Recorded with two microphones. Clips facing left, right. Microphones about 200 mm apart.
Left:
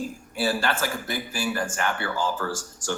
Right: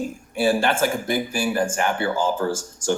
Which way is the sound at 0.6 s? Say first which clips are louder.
Right 6 dB; 25° right (ahead or behind).